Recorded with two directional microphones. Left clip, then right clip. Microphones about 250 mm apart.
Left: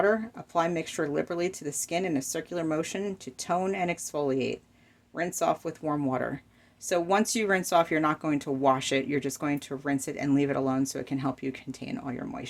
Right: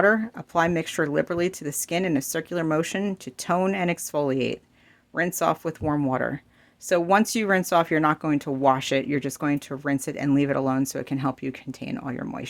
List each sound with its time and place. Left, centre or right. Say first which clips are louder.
0.0 s speech: right 5 dB; right